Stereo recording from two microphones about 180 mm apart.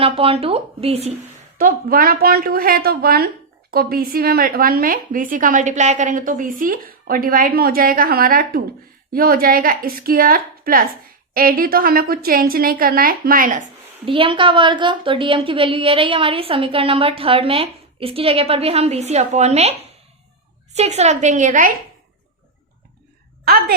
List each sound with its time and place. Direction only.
0.0 s a woman's voice: 30° right (ahead or behind)
1.5 s a woman's voice: 50° right (ahead or behind)
14.0 s a woman's voice: 30° right (ahead or behind)
20.7 s a woman's voice: 40° right (ahead or behind)